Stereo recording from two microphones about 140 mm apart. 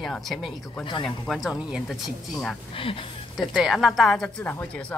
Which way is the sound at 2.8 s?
40° left (ahead or behind).